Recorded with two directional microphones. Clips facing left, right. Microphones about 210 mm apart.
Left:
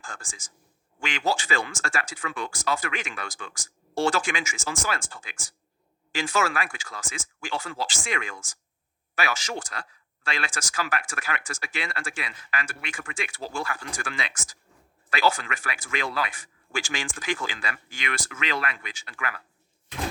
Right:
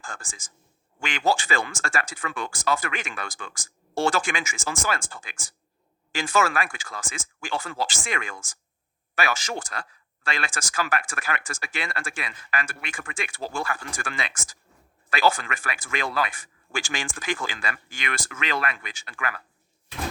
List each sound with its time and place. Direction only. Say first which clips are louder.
0.0 s speech: right 2 dB; 50° right (ahead or behind)